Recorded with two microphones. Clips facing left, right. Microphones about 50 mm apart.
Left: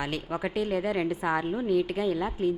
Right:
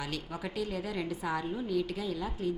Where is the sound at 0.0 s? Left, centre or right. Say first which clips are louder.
Left 7 dB; left.